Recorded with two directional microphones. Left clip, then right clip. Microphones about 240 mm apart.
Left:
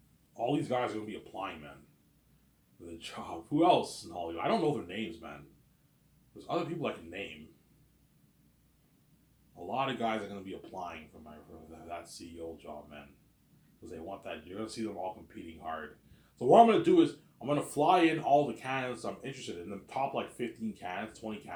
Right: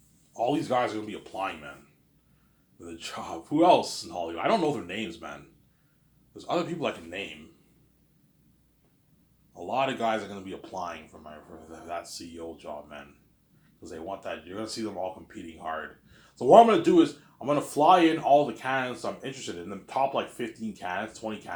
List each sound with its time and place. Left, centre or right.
0.3 s speech: centre
2.8 s speech: centre
9.6 s speech: right